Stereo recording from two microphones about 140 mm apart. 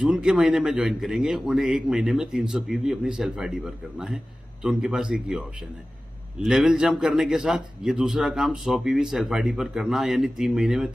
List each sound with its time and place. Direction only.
0.0 s a man's voice: 5° right (ahead or behind)
6.4 s a man's voice: 5° right (ahead or behind)